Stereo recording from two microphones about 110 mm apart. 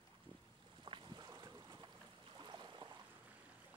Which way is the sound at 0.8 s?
45° right (ahead or behind).